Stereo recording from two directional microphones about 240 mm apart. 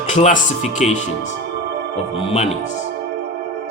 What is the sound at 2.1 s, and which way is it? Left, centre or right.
Speech, left.